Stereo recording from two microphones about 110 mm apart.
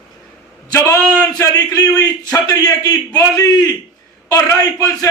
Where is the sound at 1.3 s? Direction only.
35° left (ahead or behind).